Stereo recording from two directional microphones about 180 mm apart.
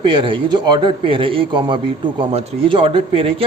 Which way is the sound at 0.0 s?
25° right (ahead or behind).